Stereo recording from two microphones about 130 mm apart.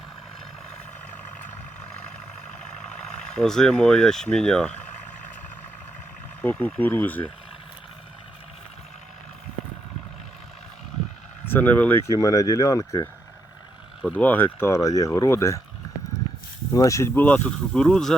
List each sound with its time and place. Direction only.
3.3 s speech: 5° left (ahead or behind)
6.4 s speech: 15° left (ahead or behind)
11.4 s speech: 15° left (ahead or behind)
14.2 s speech: 15° left (ahead or behind)
16.7 s speech: 25° left (ahead or behind)
17.2 s speech: 10° left (ahead or behind)